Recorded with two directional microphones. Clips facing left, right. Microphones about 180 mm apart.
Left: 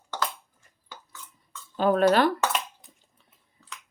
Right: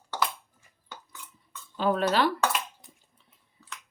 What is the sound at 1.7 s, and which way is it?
Speech, 50° left (ahead or behind).